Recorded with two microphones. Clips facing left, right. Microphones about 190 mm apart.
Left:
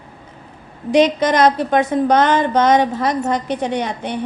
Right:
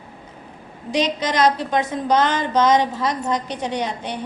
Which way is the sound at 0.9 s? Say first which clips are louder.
Left 8 dB; 55° left (ahead or behind).